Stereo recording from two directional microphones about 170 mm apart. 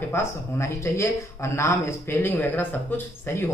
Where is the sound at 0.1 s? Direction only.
15° left (ahead or behind).